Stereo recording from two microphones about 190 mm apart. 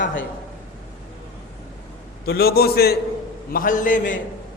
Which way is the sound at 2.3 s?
55° left (ahead or behind).